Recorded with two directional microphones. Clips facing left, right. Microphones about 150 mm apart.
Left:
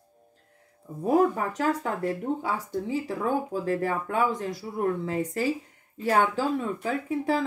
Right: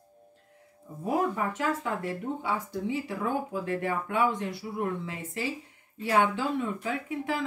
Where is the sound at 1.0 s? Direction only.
40° left (ahead or behind).